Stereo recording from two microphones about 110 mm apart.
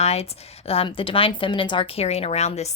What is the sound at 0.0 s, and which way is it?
A woman's voice, 75° left (ahead or behind).